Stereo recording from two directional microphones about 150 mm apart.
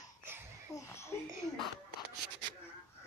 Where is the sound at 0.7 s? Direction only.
15° left (ahead or behind).